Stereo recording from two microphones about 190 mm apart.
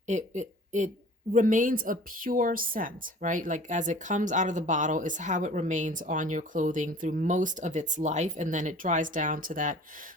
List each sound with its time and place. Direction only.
0.1 s a woman's voice: 40° right (ahead or behind)